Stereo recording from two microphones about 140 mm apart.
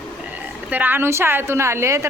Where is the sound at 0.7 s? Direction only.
10° right (ahead or behind).